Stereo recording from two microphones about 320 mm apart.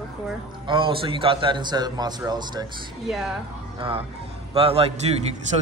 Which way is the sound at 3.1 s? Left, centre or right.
Centre.